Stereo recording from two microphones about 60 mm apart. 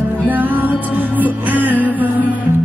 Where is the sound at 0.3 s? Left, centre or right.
Right.